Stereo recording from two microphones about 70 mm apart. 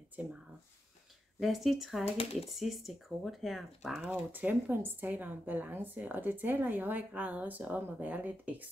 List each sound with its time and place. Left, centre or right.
0.1 s speech: right
1.4 s speech: centre
4.0 s speech: right